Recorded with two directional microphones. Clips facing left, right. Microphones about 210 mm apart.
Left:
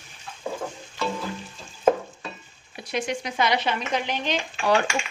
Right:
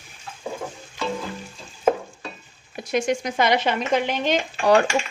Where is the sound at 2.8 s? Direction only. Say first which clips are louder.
Right 6 dB; 45° right (ahead or behind).